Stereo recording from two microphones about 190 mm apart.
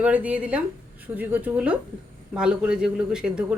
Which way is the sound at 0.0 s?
5° right (ahead or behind).